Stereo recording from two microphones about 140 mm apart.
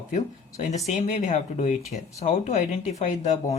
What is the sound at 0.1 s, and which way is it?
Speech, 60° left (ahead or behind).